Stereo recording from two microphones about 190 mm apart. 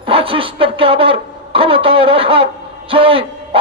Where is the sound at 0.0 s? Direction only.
30° right (ahead or behind).